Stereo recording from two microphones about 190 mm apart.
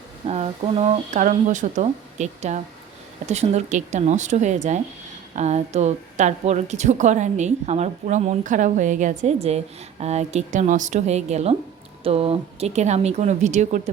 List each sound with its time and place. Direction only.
0.3 s a woman's voice: 35° right (ahead or behind)